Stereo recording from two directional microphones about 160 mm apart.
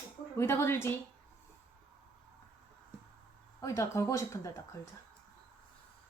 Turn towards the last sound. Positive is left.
turn(degrees=20)  # may be behind; listen again after turning